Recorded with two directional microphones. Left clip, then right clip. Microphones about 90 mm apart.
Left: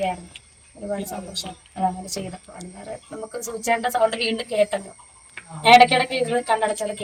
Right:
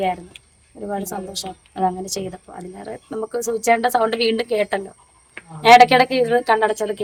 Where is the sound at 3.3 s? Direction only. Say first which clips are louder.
Right 6 dB; 25° right (ahead or behind).